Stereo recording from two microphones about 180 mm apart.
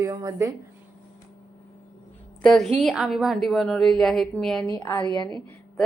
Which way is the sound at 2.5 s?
Centre (ahead or behind).